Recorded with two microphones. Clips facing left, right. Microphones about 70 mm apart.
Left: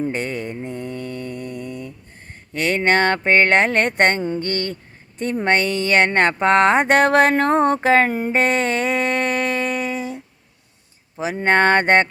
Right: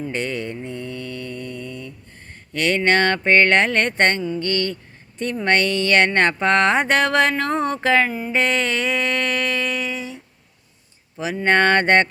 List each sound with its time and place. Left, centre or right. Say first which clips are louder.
0.1 s speech: even; centre
0.6 s mantra: left 2 dB; left
2.5 s speech: even; left
4.4 s mantra: right 1 dB; left
5.2 s speech: left 1 dB; left
8.3 s a sound: left 2 dB; left
11.2 s speech: left 1 dB; left